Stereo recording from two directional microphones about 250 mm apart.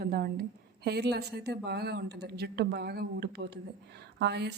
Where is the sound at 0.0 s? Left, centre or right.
Right.